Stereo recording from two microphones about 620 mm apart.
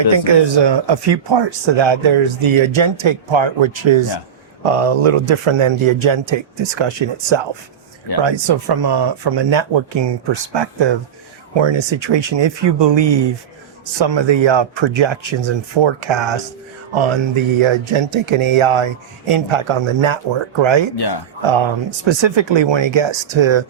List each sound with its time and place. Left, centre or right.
0.3 s speech: right
4.6 s speech: right
20.9 s speech: left
21.4 s speech: right